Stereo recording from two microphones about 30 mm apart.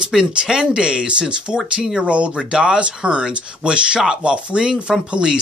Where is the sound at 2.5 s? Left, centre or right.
Right.